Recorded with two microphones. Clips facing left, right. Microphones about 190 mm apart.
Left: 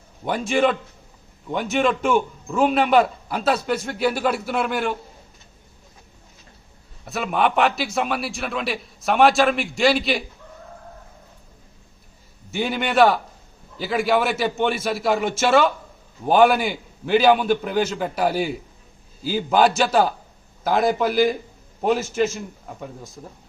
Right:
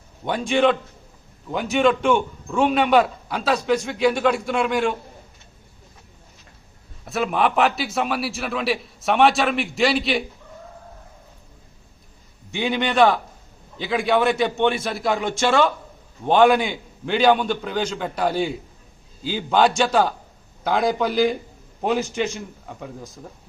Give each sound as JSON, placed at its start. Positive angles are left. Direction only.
{"t": 0.3, "sound": "a man's voice", "side_deg": 5}
{"t": 7.0, "sound": "a man's voice", "side_deg": 0}
{"t": 12.5, "sound": "a man's voice", "side_deg": 5}